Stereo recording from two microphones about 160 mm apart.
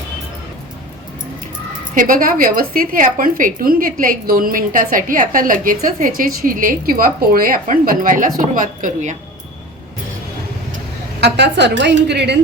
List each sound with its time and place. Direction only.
2.0 s a woman's voice: 60° right (ahead or behind)
11.2 s a woman's voice: 90° right